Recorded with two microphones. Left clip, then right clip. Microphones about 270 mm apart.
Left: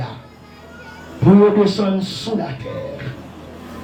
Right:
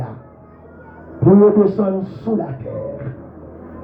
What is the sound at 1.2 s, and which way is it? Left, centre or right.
A man's voice, left.